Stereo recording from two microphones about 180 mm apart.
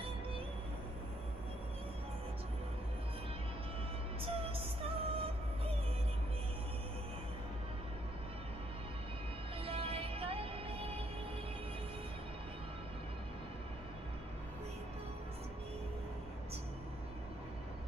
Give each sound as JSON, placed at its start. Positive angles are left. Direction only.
{"t": 4.2, "sound": "music", "side_deg": -30}
{"t": 9.7, "sound": "music", "side_deg": -30}